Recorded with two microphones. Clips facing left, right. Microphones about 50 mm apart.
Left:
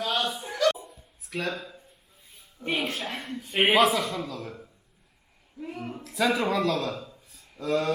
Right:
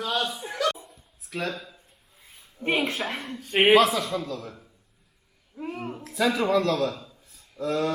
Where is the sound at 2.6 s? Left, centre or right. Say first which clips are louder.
Right 4 dB; right.